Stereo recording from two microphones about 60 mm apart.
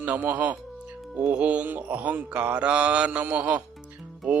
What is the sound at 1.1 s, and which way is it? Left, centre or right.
Mantra, centre.